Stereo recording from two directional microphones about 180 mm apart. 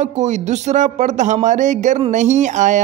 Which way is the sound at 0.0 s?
40° right (ahead or behind).